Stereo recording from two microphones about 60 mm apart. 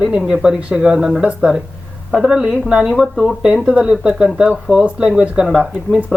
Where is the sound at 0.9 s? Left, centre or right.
Centre.